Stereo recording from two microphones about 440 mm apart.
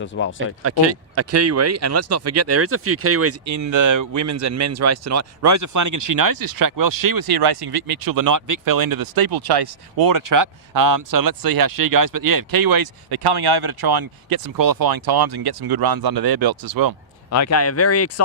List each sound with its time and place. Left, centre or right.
0.0 s speech: left
0.6 s speech: right
17.3 s speech: left